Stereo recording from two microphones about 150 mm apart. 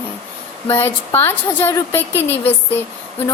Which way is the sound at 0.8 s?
15° left (ahead or behind).